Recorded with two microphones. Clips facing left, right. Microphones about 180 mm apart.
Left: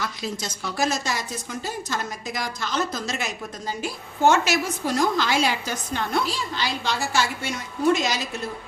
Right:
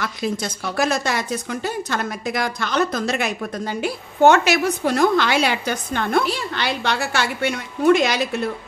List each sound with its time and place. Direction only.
0.0 s a woman's voice: 60° right (ahead or behind)